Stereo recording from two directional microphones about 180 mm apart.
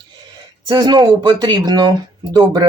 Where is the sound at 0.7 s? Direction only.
20° right (ahead or behind).